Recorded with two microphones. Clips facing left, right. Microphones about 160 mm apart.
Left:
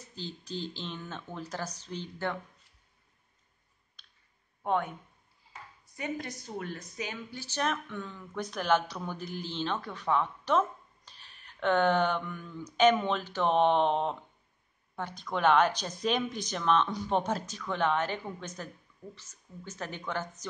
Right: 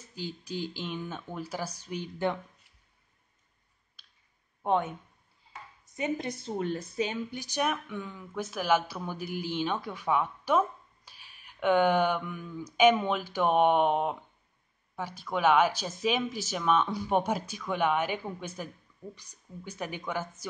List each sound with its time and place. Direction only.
0.1 s speech: 10° right (ahead or behind)
4.6 s a woman's voice: 20° right (ahead or behind)
5.9 s speech: 20° right (ahead or behind)